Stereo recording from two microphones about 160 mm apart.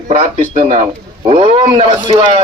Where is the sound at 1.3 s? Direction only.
40° right (ahead or behind).